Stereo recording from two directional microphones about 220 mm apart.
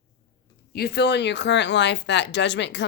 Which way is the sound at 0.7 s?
45° left (ahead or behind).